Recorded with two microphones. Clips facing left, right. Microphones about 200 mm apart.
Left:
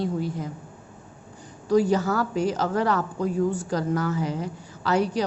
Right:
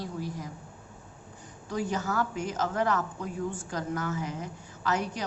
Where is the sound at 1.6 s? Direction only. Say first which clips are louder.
Left 10 dB; 35° left (ahead or behind).